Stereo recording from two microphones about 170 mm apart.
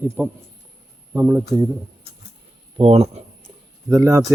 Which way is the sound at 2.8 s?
35° right (ahead or behind).